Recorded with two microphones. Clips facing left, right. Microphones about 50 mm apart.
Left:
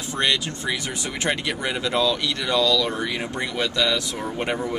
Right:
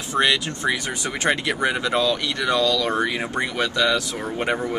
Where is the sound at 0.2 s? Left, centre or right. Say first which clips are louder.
Right 3 dB; centre.